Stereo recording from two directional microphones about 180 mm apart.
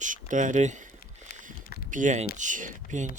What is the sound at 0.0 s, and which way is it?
Speech, 45° right (ahead or behind).